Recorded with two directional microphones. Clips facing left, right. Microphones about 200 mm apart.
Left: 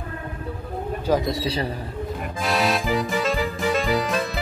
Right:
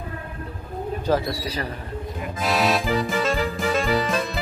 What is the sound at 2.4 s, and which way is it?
Music, centre (ahead or behind).